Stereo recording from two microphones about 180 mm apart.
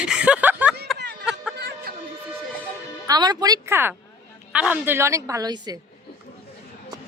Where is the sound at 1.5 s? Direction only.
65° right (ahead or behind).